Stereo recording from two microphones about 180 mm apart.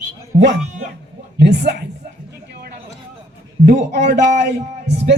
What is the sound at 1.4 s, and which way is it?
Speech, 70° right (ahead or behind).